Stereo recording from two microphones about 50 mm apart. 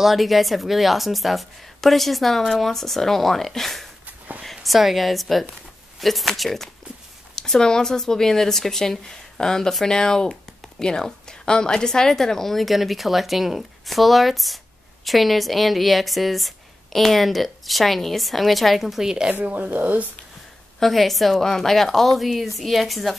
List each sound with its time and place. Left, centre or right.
0.0 s speech: centre
7.3 s speech: centre
19.4 s speech: right
20.8 s speech: centre